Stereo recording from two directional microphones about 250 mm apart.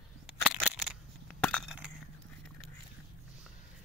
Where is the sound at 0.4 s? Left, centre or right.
Centre.